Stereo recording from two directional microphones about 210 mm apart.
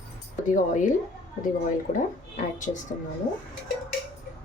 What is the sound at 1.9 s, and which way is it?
Speech, 40° left (ahead or behind).